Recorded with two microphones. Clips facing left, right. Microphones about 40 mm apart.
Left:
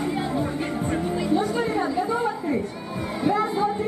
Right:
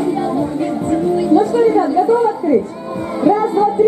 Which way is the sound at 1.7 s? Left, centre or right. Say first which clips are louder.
Right 11 dB; centre.